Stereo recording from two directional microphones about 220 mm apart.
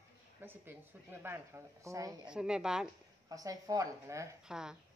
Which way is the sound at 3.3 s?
15° right (ahead or behind).